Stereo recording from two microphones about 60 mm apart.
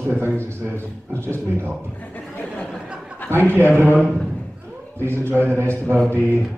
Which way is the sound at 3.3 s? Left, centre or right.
Right.